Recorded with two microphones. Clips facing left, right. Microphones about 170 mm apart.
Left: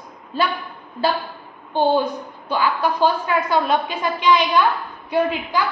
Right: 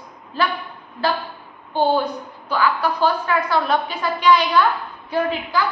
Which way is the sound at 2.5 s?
20° left (ahead or behind).